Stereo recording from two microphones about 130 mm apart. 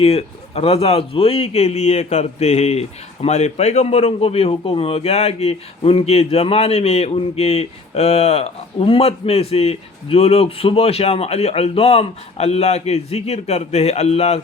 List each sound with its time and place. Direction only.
0.0 s speech: 50° left (ahead or behind)